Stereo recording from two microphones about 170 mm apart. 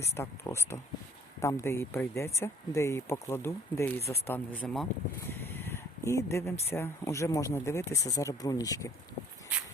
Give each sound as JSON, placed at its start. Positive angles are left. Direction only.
{"t": 0.2, "sound": "speech", "side_deg": 15}